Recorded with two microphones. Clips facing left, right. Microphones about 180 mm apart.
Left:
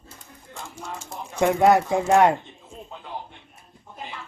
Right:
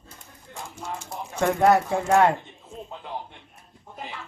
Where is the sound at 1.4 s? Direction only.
15° left (ahead or behind).